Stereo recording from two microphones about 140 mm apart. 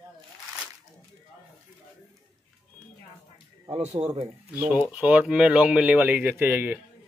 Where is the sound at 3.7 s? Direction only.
50° right (ahead or behind).